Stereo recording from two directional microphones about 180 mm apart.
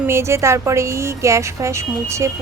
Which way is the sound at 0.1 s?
15° right (ahead or behind).